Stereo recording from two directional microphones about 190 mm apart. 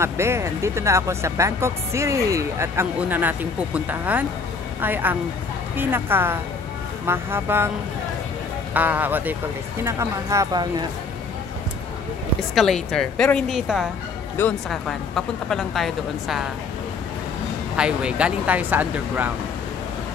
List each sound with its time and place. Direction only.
0.0 s speech: 15° right (ahead or behind)
8.7 s speech: 10° right (ahead or behind)
12.5 s a woman's voice: centre (ahead or behind)
17.7 s speech: 5° right (ahead or behind)